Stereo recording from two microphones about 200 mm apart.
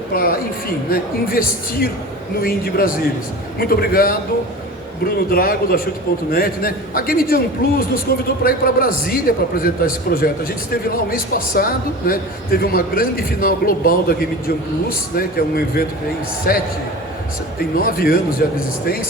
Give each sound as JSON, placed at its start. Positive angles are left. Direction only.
{"t": 0.1, "sound": "a man's voice", "side_deg": 45}
{"t": 17.7, "sound": "a man's voice", "side_deg": 45}